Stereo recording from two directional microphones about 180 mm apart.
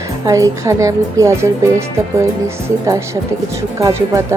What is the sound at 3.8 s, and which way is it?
Speech, 15° right (ahead or behind).